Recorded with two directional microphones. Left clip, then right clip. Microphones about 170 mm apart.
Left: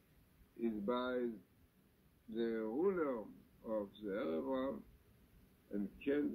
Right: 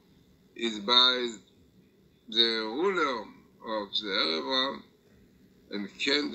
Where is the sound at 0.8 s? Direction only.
45° right (ahead or behind).